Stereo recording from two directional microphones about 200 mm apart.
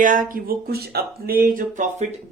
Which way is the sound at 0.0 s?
40° right (ahead or behind).